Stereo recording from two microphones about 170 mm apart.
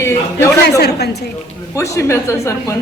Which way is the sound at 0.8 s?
75° left (ahead or behind).